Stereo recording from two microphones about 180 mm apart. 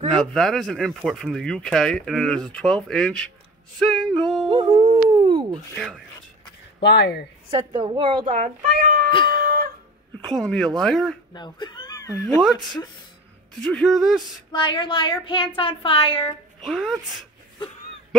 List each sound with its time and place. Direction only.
0.2 s speech: centre (ahead or behind)
4.0 s yodeling: centre (ahead or behind)
4.5 s howl: 25° right (ahead or behind)
5.8 s speech: centre (ahead or behind)
6.8 s speech: 70° left (ahead or behind)
7.5 s speech: 25° right (ahead or behind); by 9.1 s 45° right (ahead or behind)
9.3 s a sound: 55° right (ahead or behind)
10.2 s speech: 5° left (ahead or behind)
11.3 s speech: 25° left (ahead or behind)
13.7 s speech: centre (ahead or behind)
14.5 s speech: 25° left (ahead or behind)
16.6 s speech: centre (ahead or behind)